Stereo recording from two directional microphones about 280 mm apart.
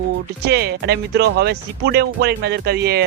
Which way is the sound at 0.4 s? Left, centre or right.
Right.